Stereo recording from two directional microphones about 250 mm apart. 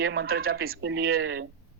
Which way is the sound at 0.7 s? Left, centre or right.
Right.